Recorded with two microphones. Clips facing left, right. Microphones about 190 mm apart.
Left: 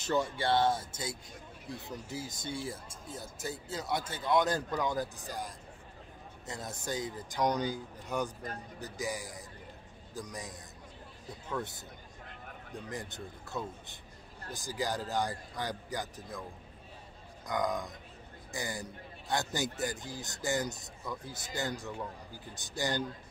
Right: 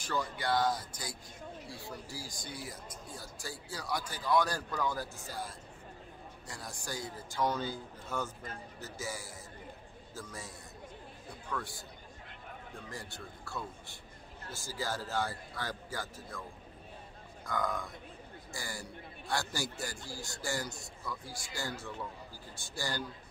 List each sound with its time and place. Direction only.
0.0 s a man's voice: 25° left (ahead or behind)
11.4 s a man's voice: 20° left (ahead or behind)
12.9 s a man's voice: 20° left (ahead or behind)
17.5 s a man's voice: 20° left (ahead or behind)